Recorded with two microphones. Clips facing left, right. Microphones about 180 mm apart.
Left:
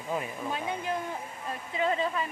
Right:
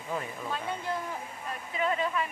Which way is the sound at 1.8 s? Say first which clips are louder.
Left 1 dB; 30° left (ahead or behind).